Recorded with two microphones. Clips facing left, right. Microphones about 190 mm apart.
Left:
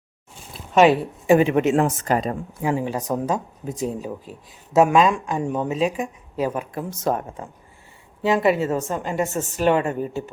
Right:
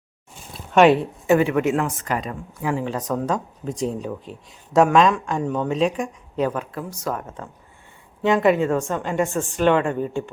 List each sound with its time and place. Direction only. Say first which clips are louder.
0.7 s speech: right 1 dB; centre (ahead or behind)
1.3 s speech: left 2 dB; 20° left (ahead or behind)
8.2 s a woman's voice: right 1 dB; 5° left (ahead or behind)